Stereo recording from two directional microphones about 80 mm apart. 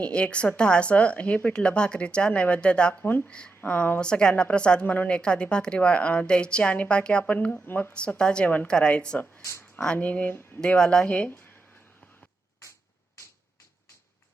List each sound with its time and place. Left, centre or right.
0.0 s a woman's voice: centre
4.0 s a woman's voice: centre
9.5 s a sound: left
9.8 s speech: centre
10.6 s a woman's voice: centre